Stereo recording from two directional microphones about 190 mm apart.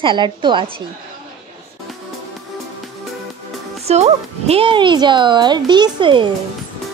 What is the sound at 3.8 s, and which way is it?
Speech, 35° right (ahead or behind).